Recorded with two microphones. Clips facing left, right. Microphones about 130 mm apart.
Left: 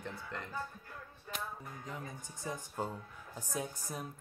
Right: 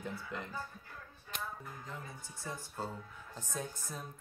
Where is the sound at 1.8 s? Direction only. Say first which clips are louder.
Left 2 dB; 15° left (ahead or behind).